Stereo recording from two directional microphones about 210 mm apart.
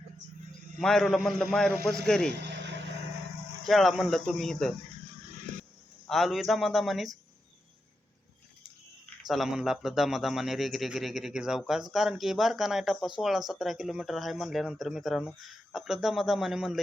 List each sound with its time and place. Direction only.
0.8 s speech: centre (ahead or behind)
2.4 s vehicle: 55° right (ahead or behind)
3.6 s speech: centre (ahead or behind)
6.1 s speech: centre (ahead or behind)
9.2 s speech: centre (ahead or behind)